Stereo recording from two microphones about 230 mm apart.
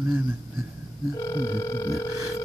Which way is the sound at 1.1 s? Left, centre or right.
Centre.